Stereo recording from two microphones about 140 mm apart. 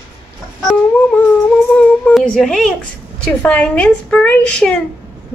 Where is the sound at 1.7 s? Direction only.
5° left (ahead or behind).